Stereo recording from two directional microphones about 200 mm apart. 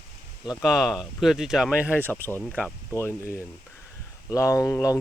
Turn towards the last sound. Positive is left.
turn(degrees=15)  # may be behind; listen again after turning